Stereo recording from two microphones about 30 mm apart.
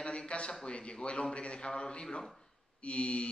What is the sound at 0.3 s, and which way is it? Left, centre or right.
A man's voice, left.